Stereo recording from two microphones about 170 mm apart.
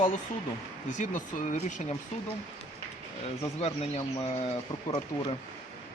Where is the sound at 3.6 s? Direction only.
40° left (ahead or behind).